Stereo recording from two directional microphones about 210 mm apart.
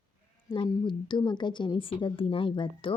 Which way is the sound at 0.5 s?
20° left (ahead or behind).